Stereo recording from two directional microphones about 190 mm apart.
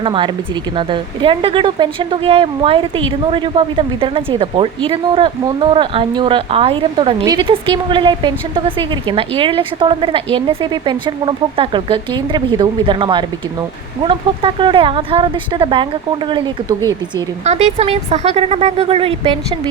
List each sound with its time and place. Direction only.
0.0 s speech: 25° right (ahead or behind)
17.4 s speech: 35° right (ahead or behind)